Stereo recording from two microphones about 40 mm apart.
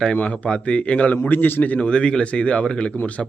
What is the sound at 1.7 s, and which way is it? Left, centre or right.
A man's voice, left.